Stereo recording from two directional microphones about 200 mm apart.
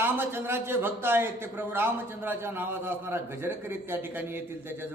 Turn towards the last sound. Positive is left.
turn(degrees=-10)  # may be behind; listen again after turning